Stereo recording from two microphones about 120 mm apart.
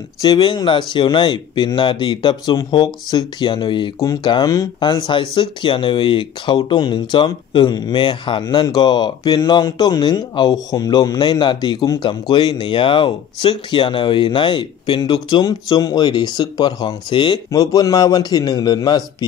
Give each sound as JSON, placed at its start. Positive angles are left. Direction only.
{"t": 0.2, "sound": "speech", "side_deg": 35}
{"t": 17.5, "sound": "speech", "side_deg": 30}